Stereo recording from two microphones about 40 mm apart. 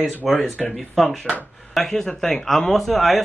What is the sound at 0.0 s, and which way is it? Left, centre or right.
Speech, centre.